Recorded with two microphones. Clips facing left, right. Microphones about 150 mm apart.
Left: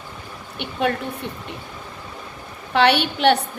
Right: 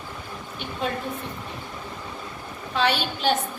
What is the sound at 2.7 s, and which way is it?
Speech, 70° left (ahead or behind).